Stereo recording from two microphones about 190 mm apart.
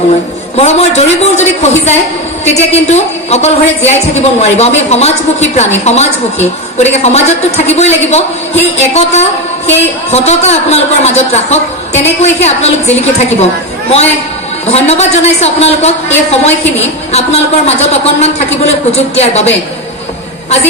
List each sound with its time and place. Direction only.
0.6 s a woman's voice: 35° left (ahead or behind)